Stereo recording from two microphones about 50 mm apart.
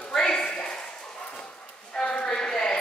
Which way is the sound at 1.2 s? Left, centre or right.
Left.